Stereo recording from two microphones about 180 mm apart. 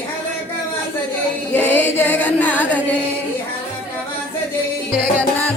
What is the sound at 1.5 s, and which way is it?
Chant, 10° left (ahead or behind).